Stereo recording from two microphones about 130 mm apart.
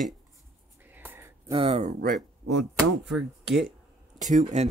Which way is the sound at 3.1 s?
Centre (ahead or behind).